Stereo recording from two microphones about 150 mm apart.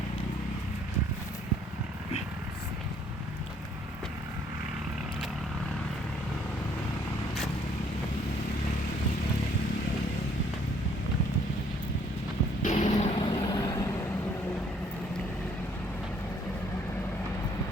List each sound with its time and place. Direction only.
12.6 s vehicle: 50° left (ahead or behind)
13.1 s vehicle: 30° left (ahead or behind)